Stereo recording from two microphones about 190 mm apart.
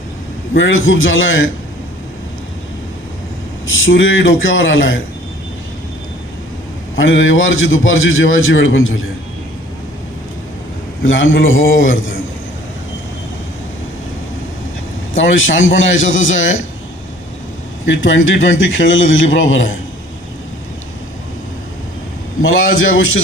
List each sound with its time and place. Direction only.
0.5 s a man's voice: 85° left
3.7 s a man's voice: 90° left
6.9 s a man's voice: 90° left
11.0 s a man's voice: 90° left
15.1 s a man's voice: 90° left
17.8 s a man's voice: 85° left
22.4 s a man's voice: 90° left